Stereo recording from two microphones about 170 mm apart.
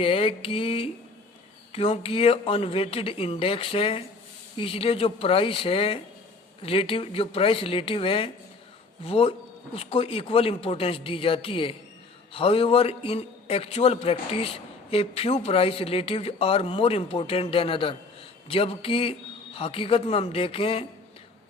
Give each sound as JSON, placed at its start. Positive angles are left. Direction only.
{"t": 0.0, "sound": "a man's voice", "side_deg": 35}